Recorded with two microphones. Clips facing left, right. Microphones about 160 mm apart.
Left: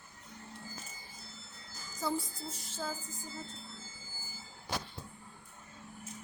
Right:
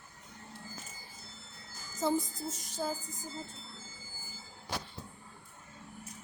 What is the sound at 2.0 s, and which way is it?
Music, 20° right (ahead or behind).